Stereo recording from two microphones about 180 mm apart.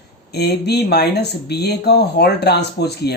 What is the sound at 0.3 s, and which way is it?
Speech, 65° left (ahead or behind).